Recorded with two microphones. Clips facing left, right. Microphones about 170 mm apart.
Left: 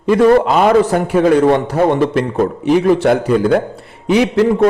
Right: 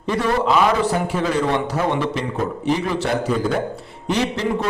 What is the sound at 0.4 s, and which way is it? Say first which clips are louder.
A man's voice: left 6 dB; 50° left (ahead or behind).